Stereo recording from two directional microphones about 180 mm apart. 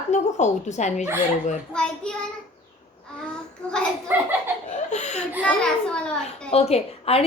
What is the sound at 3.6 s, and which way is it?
Speech, 5° left (ahead or behind).